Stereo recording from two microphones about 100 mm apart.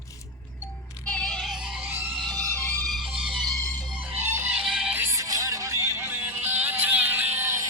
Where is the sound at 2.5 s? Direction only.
20° left (ahead or behind).